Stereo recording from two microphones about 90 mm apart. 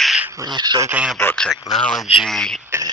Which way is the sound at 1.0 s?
15° right (ahead or behind).